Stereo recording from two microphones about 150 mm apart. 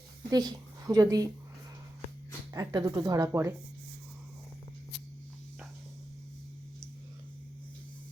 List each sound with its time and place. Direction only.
0.3 s a woman's voice: 25° right (ahead or behind)
2.5 s a woman's voice: 25° right (ahead or behind)